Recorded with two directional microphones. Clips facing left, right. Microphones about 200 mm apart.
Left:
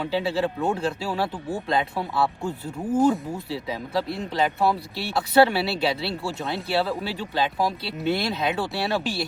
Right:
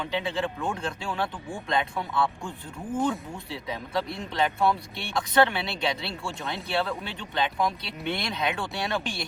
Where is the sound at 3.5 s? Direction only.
Centre (ahead or behind).